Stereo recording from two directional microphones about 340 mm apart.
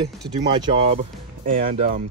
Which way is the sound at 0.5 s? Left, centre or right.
Centre.